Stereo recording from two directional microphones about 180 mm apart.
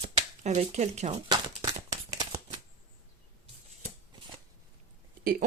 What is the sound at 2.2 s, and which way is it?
Shuffling cards, 30° right (ahead or behind).